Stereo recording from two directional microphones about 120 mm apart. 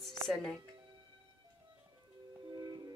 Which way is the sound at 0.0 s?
5° left (ahead or behind).